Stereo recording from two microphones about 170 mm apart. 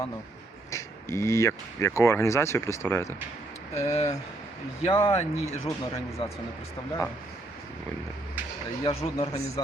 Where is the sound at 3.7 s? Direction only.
40° left (ahead or behind).